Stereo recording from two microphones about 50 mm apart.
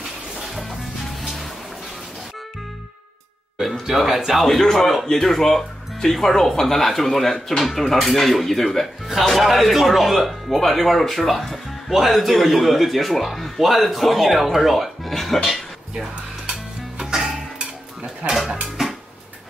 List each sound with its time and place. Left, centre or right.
3.8 s speech: centre
17.0 s music: centre
18.2 s speech: right